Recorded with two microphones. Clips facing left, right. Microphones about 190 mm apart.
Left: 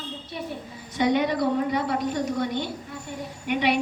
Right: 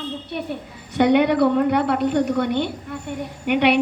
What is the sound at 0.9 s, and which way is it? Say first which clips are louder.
A woman's voice: right 7 dB; 65° right (ahead or behind).